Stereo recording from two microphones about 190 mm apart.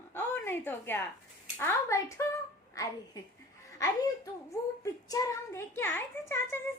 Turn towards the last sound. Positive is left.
turn(degrees=10)  # may be behind; listen again after turning